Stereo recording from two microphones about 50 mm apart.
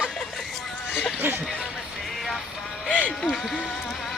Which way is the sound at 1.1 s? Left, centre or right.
Right.